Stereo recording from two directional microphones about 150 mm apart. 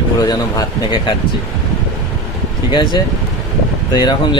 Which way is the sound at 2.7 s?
30° left (ahead or behind).